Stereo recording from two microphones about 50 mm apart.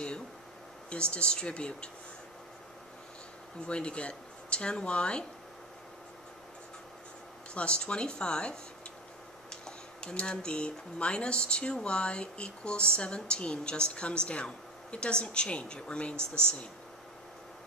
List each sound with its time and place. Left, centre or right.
1.1 s speech: centre
3.6 s speech: left
7.5 s speech: left